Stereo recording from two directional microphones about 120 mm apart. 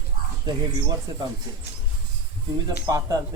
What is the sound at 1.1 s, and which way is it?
Speech, 35° right (ahead or behind).